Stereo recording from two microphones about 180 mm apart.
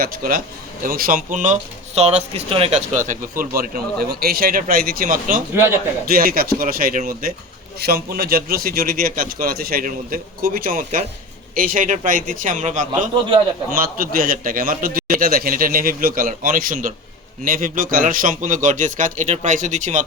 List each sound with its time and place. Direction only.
0.0 s a man's voice: 55° right (ahead or behind)